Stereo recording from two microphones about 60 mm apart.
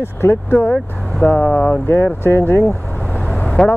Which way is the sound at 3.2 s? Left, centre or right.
Left.